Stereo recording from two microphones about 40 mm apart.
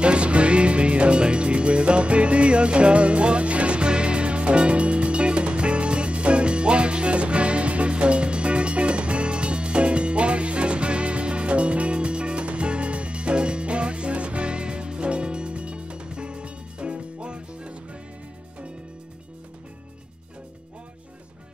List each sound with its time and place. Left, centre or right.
0.0 s music: right